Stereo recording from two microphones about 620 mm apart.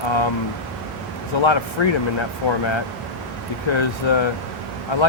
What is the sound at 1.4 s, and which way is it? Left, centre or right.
Speech, left.